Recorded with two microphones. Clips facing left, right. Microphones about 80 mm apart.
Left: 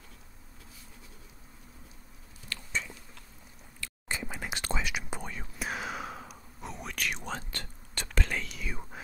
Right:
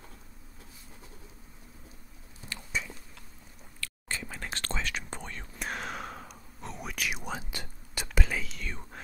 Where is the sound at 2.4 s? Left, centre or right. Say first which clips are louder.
Even; right.